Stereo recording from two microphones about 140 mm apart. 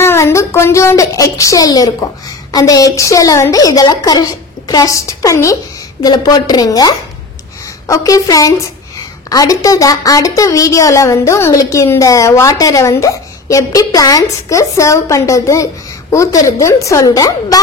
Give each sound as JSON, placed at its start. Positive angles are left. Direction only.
{"t": 0.0, "sound": "a woman's voice", "side_deg": 20}